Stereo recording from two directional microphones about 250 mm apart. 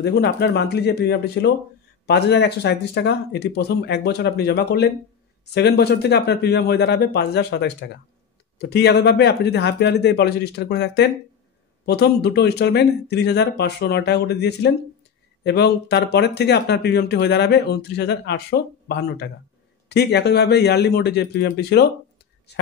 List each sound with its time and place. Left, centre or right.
0.0 s speech: left